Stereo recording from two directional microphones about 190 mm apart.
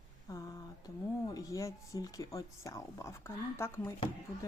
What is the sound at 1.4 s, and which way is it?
Speech, 15° left (ahead or behind).